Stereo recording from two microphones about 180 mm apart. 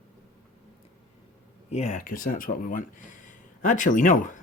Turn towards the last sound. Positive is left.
turn(degrees=45)  # may be behind; listen again after turning